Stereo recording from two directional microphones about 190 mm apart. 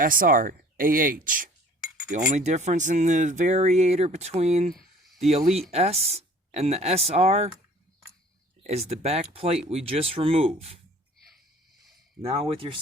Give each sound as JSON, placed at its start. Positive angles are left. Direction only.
{"t": 0.0, "sound": "speech", "side_deg": -45}
{"t": 5.7, "sound": "speech", "side_deg": -35}
{"t": 8.6, "sound": "speech", "side_deg": -35}
{"t": 12.2, "sound": "speech", "side_deg": -30}